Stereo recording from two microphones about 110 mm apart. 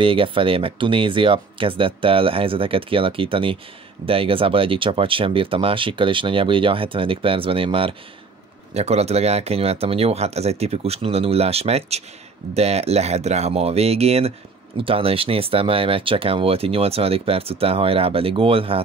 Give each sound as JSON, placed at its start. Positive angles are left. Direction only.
{"t": 0.0, "sound": "speech", "side_deg": -55}
{"t": 8.7, "sound": "speech", "side_deg": -75}
{"t": 14.8, "sound": "speech", "side_deg": -55}